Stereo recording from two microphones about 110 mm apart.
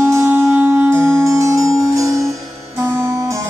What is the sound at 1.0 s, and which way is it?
Music, 30° right (ahead or behind).